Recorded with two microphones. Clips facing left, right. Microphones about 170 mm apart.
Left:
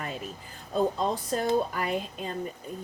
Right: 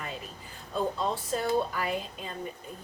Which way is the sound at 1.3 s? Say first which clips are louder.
Left 1 dB; 45° left (ahead or behind).